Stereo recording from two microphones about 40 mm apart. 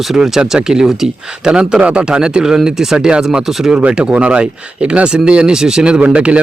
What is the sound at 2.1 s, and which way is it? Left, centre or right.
Speech, right.